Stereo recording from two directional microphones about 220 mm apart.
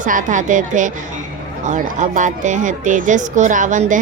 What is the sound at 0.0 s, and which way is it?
Speech, 35° right (ahead or behind).